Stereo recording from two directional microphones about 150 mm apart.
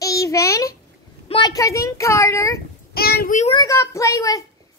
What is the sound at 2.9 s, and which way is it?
Speech, 90° left.